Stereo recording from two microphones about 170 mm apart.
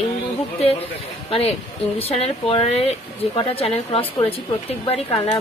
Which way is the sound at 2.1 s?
35° left (ahead or behind).